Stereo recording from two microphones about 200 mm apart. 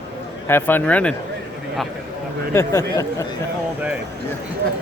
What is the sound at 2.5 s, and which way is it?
Speech, 15° left (ahead or behind).